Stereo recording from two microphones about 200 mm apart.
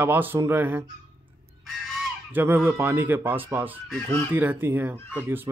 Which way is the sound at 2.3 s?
10° right (ahead or behind).